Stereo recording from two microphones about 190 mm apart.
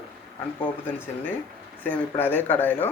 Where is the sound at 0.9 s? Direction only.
10° left (ahead or behind).